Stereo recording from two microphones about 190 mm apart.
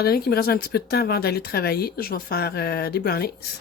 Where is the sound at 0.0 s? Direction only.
55° left (ahead or behind).